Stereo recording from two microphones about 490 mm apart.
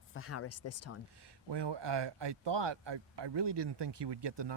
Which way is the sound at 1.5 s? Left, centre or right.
Right.